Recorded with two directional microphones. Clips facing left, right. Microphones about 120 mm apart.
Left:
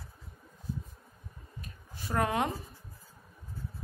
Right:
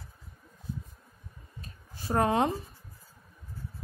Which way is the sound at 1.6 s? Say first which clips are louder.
Even; 30° right (ahead or behind).